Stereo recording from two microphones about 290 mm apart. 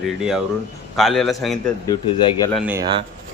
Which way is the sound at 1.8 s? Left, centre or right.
Centre.